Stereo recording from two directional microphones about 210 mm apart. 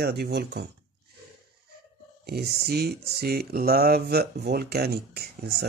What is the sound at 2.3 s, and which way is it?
Speech, 50° right (ahead or behind).